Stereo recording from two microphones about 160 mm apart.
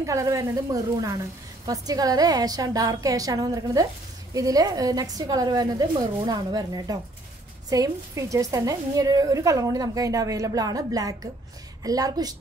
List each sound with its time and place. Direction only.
0.0 s a woman's voice: 20° right (ahead or behind)